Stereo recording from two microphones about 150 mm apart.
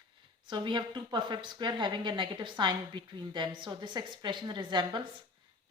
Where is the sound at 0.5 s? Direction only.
30° right (ahead or behind).